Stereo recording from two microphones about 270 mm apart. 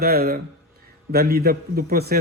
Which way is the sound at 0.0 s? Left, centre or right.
Right.